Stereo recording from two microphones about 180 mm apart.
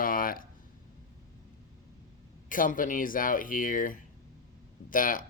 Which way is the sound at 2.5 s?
50° left (ahead or behind).